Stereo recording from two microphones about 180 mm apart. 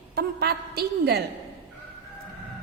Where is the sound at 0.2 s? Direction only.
65° right (ahead or behind).